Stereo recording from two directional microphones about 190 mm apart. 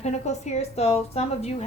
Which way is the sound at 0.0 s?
35° left (ahead or behind).